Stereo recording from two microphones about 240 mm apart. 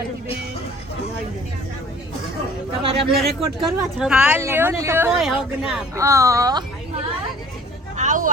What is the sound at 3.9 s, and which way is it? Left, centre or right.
Speech, centre.